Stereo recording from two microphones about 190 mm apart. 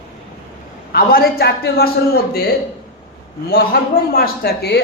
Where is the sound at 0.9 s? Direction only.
50° left (ahead or behind).